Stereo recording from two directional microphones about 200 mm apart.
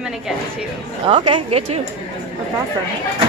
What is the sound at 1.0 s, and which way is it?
Speech, 25° right (ahead or behind).